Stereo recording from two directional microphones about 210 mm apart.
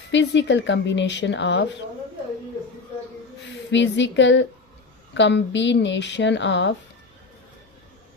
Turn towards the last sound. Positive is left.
turn(degrees=60)  # may be behind; listen again after turning